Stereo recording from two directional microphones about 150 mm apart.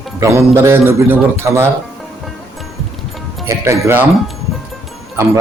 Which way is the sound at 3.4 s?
15° right (ahead or behind).